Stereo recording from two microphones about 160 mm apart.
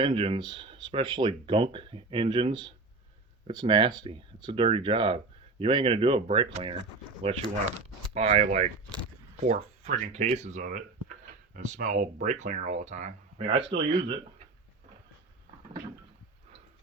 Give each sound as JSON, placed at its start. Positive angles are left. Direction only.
{"t": 0.0, "sound": "speech", "side_deg": -30}
{"t": 13.5, "sound": "speech", "side_deg": -30}